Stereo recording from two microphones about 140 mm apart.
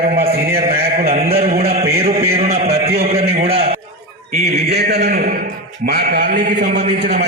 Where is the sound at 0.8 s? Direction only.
90° right.